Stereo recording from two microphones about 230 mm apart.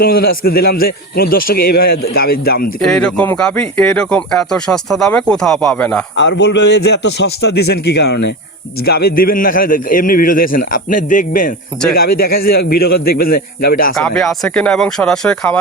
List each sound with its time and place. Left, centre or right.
0.0 s a man's voice: left
2.8 s speech: centre
6.1 s a man's voice: left
13.9 s speech: centre